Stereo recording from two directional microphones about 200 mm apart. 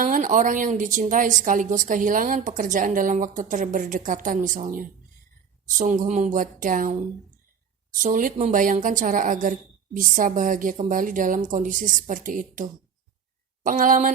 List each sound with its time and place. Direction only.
0.0 s a woman's voice: 40° right (ahead or behind)
8.0 s a woman's voice: 40° right (ahead or behind)
13.7 s speech: 45° right (ahead or behind)